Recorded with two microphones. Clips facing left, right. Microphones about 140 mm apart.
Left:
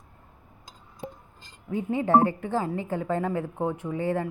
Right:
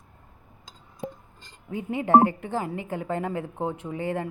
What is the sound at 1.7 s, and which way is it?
A woman's voice, 20° right (ahead or behind).